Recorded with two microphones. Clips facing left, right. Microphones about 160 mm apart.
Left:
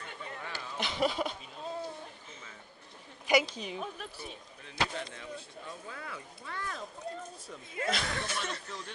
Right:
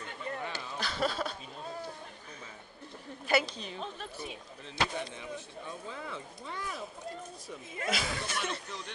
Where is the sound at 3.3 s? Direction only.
10° left (ahead or behind).